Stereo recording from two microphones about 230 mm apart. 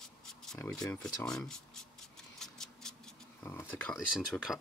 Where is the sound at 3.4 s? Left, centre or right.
Centre.